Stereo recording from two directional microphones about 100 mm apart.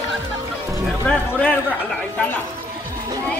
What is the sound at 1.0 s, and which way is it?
Speech, 15° left (ahead or behind).